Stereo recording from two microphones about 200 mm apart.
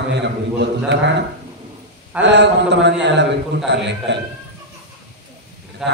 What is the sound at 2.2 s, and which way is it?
A man's voice, 60° right (ahead or behind).